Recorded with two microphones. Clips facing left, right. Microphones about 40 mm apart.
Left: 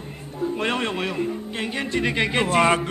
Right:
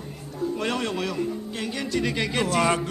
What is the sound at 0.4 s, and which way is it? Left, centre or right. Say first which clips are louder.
A man's voice: left 2 dB; left.